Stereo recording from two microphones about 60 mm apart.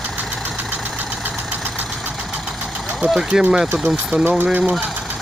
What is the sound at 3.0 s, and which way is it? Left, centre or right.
Speech, centre.